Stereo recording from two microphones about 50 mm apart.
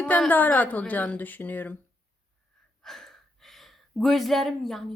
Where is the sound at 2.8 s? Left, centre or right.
Centre.